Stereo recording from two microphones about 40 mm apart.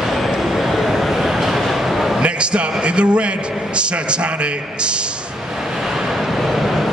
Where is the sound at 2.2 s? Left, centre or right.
Right.